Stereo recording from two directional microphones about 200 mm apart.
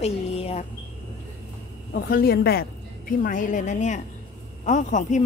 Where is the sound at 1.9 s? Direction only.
50° left (ahead or behind).